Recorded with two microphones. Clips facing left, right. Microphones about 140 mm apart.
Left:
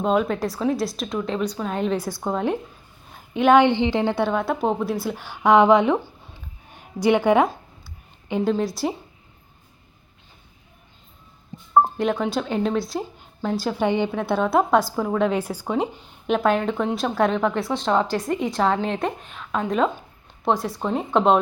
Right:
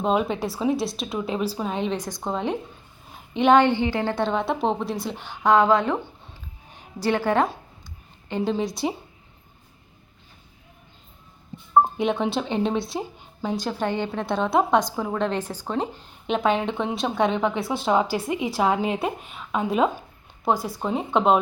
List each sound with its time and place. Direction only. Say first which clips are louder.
0.0 s a woman's voice: left 2 dB; 5° right (ahead or behind)
3.7 s a woman's voice: left 3 dB; 20° left (ahead or behind)
4.1 s a woman's voice: left 2 dB; 5° left (ahead or behind)
7.3 s a woman's voice: left 4 dB; 15° left (ahead or behind)
8.4 s a woman's voice: left 2 dB; centre (ahead or behind)
11.8 s a woman's voice: left 1 dB; centre (ahead or behind)